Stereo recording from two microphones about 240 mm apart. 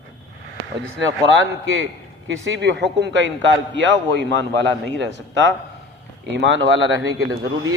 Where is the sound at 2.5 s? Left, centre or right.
Right.